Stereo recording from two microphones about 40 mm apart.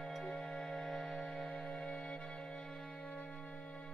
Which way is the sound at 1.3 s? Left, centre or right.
Centre.